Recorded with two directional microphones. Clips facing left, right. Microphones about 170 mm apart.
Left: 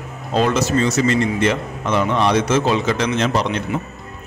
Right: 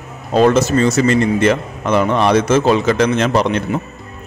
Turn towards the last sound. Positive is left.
turn(degrees=-55)  # may be behind; listen again after turning